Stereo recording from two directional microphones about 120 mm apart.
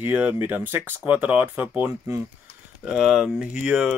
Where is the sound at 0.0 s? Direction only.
15° right (ahead or behind).